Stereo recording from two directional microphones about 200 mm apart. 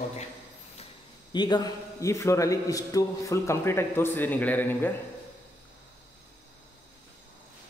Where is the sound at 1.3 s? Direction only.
20° left (ahead or behind).